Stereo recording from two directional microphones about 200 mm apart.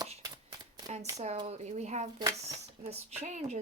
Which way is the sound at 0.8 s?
20° right (ahead or behind).